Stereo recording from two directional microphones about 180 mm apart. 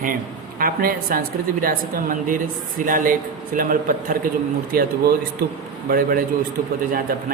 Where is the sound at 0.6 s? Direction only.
50° right (ahead or behind).